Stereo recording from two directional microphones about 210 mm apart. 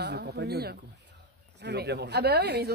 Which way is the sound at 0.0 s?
55° right (ahead or behind).